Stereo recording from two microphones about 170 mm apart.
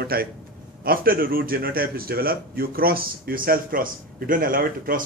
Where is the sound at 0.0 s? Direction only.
65° right (ahead or behind).